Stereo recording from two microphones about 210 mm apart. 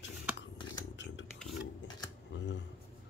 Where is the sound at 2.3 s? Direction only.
60° left (ahead or behind).